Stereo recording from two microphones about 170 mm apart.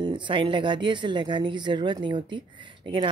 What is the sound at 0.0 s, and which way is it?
Speech, 30° right (ahead or behind).